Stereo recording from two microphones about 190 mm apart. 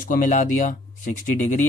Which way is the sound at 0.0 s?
45° left (ahead or behind).